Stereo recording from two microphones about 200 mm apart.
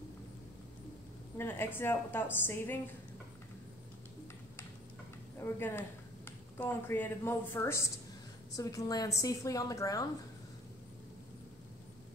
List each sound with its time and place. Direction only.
1.4 s speech: 10° left (ahead or behind)
5.4 s speech: 10° left (ahead or behind)